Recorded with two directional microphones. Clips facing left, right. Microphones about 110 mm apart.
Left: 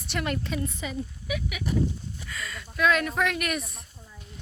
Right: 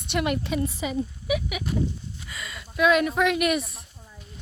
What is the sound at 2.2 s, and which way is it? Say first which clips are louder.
Speech: left 2 dB; 5° right (ahead or behind).